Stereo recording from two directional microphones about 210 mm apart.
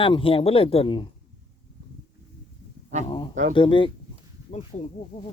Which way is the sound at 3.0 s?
20° left (ahead or behind).